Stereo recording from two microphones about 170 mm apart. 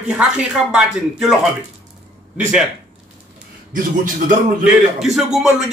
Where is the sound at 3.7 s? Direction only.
50° right (ahead or behind).